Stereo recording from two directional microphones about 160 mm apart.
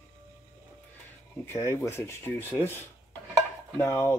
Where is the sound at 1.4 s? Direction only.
15° left (ahead or behind).